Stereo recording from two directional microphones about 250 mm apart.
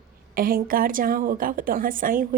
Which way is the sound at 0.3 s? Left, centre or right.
Right.